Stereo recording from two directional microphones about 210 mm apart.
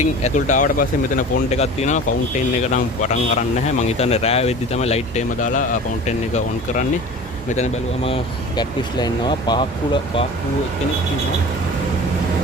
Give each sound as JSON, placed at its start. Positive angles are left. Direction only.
{"t": 0.0, "sound": "speech", "side_deg": 35}